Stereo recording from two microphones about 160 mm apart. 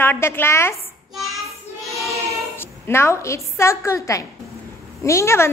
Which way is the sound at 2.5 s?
15° left (ahead or behind).